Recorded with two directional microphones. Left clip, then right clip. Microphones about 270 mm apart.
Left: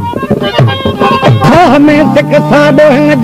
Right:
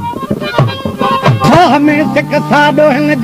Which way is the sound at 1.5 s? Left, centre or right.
Right.